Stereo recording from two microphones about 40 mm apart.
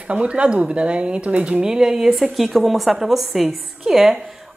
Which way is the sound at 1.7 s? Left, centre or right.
Centre.